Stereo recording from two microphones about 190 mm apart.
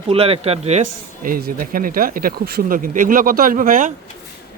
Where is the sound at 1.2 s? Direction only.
50° right (ahead or behind).